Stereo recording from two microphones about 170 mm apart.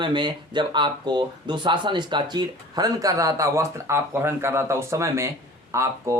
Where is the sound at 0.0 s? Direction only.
25° right (ahead or behind).